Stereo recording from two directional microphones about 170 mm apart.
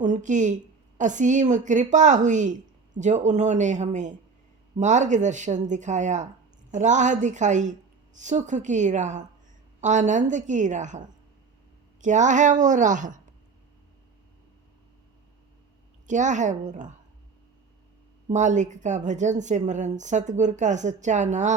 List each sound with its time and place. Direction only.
0.0 s a woman's voice: 45° right (ahead or behind)
12.0 s a woman's voice: 45° right (ahead or behind)
16.0 s a woman's voice: 45° right (ahead or behind)
18.3 s a woman's voice: 45° right (ahead or behind)